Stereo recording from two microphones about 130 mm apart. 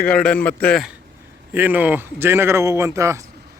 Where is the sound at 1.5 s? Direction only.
15° right (ahead or behind).